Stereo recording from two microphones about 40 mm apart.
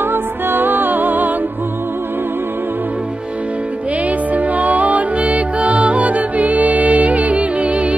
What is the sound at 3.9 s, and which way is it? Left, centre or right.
Music, right.